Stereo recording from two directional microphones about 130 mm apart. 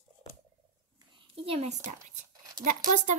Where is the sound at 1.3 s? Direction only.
50° right (ahead or behind).